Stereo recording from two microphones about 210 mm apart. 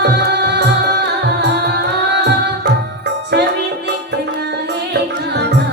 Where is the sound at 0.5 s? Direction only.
50° right (ahead or behind).